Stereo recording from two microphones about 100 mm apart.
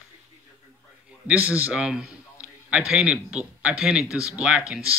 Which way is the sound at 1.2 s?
15° right (ahead or behind).